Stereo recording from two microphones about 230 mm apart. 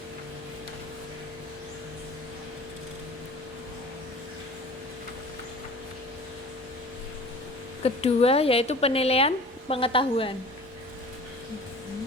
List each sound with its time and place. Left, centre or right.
7.9 s a woman's voice: left